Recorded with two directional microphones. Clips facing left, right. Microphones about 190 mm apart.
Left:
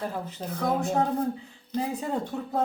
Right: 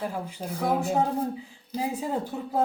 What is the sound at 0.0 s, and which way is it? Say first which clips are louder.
Speech: right 1 dB; 10° right (ahead or behind).